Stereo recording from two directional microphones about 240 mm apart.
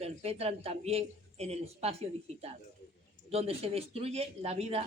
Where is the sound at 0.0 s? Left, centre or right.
Right.